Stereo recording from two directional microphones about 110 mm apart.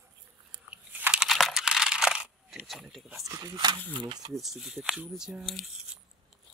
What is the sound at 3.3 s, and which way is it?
Speech, 35° right (ahead or behind).